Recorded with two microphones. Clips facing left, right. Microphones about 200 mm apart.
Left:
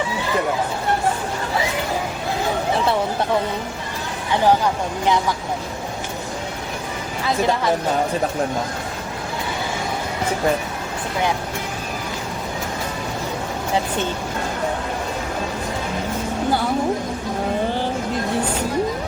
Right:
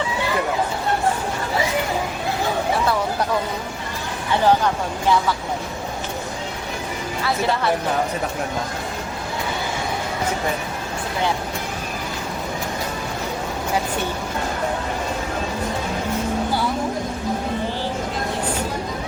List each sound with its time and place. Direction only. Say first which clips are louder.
4.3 s speech: even; 15° left (ahead or behind)
7.3 s speech: left 2 dB; 15° left (ahead or behind)